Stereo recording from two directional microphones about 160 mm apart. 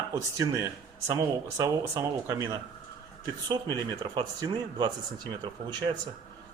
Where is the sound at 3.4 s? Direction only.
25° right (ahead or behind).